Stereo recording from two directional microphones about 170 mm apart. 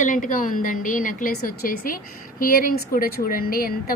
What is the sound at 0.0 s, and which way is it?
A woman's voice, 50° left (ahead or behind).